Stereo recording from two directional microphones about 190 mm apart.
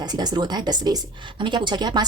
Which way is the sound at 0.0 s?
20° right (ahead or behind).